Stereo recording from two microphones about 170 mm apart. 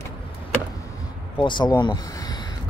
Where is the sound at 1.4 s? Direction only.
25° left (ahead or behind).